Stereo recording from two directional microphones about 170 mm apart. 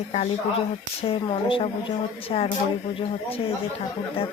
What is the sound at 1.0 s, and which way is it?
Speech, 35° left (ahead or behind).